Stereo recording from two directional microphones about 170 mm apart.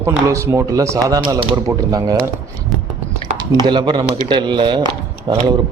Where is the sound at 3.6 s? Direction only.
25° right (ahead or behind).